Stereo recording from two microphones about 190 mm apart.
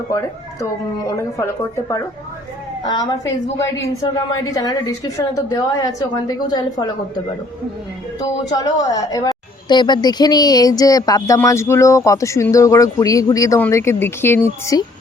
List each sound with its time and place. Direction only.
0.6 s a woman's voice: 15° left (ahead or behind)
4.4 s a woman's voice: 20° left (ahead or behind)
8.2 s a woman's voice: 20° left (ahead or behind)